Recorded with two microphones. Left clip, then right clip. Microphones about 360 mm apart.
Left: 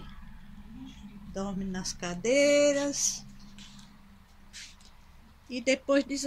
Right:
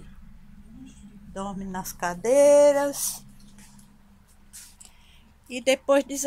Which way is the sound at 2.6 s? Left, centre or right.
Centre.